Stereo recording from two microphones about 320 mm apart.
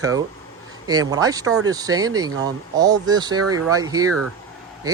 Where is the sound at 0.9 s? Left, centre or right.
Centre.